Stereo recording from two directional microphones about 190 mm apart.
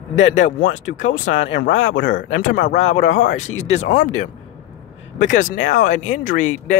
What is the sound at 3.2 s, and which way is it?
Speech, 40° left (ahead or behind).